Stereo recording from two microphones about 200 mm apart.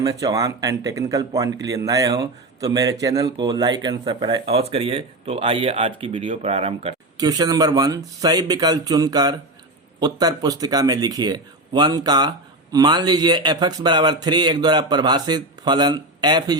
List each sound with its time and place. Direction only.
0.0 s speech: 15° right (ahead or behind)